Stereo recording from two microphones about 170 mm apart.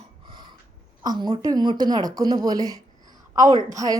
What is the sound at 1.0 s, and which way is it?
A woman's voice, 25° right (ahead or behind).